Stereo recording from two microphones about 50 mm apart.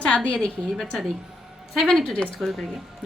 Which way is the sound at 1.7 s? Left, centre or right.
Centre.